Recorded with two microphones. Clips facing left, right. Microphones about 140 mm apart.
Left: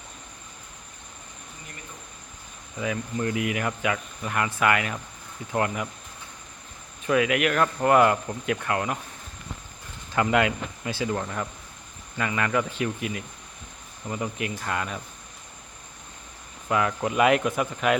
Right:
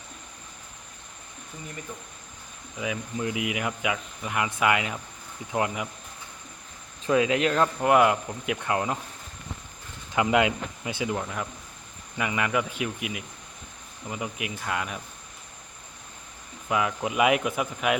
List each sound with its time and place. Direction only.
2.7 s speech: 10° right (ahead or behind)
7.0 s speech: 25° right (ahead or behind)
7.8 s speech: 10° right (ahead or behind)
10.2 s speech: 15° right (ahead or behind)
16.6 s speech: 5° right (ahead or behind)